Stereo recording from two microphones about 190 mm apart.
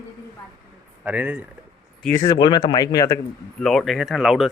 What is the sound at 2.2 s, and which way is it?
Speech, 20° left (ahead or behind).